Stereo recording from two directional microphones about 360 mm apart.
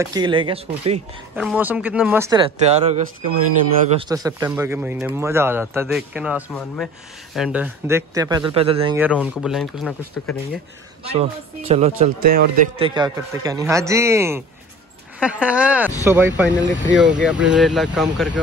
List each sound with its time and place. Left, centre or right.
0.0 s speech: centre
1.3 s a man's voice: centre
11.1 s speech: centre
12.8 s a man's voice: centre